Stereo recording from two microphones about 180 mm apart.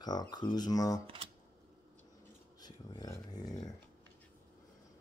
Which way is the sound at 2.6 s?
20° left (ahead or behind).